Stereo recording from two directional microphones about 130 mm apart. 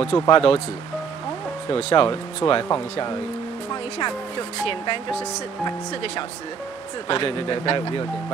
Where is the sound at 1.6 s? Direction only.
40° left (ahead or behind).